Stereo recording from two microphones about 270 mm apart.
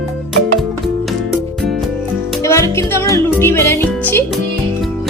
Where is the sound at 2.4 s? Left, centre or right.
Centre.